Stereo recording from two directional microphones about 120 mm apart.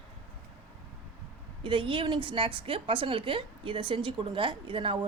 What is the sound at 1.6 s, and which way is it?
A woman's voice, 45° right (ahead or behind).